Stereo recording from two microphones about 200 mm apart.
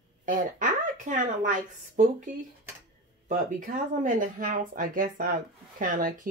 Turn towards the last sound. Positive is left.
turn(degrees=-40)  # may be behind; listen again after turning